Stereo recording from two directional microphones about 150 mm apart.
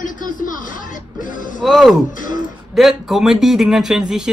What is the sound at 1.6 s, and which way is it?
Speech, centre (ahead or behind).